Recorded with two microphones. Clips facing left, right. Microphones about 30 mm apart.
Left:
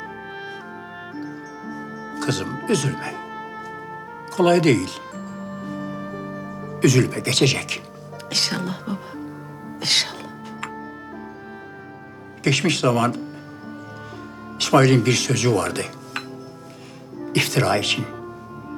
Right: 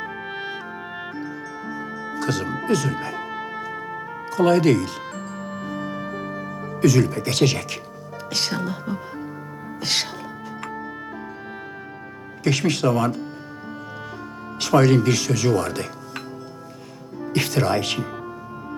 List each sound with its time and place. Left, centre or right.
0.0 s music: right
2.1 s speech: centre
3.2 s music: right
4.3 s speech: centre
5.4 s music: right
6.8 s speech: centre
9.8 s music: centre
12.5 s speech: centre
14.6 s speech: centre
17.3 s speech: centre